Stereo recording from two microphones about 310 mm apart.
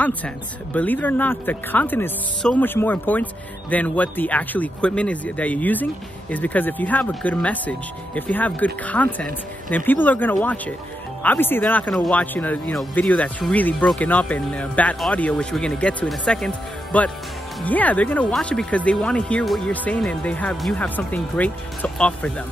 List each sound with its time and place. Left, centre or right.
0.7 s speech: centre